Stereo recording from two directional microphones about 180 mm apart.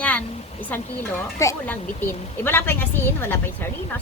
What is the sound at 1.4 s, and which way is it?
A woman's voice, 15° left (ahead or behind).